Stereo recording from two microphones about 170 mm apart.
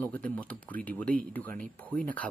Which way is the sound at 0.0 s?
10° left (ahead or behind).